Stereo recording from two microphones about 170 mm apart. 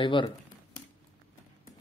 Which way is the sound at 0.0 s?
30° left (ahead or behind).